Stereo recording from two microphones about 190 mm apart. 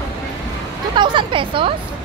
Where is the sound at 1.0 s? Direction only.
25° right (ahead or behind).